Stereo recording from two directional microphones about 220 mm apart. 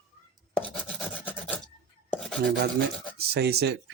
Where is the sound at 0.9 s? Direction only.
5° left (ahead or behind).